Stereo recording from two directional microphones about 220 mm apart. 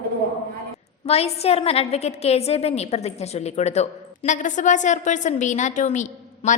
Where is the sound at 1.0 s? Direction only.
25° left (ahead or behind).